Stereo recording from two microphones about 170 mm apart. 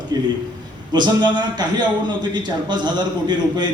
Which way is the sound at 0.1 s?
25° right (ahead or behind).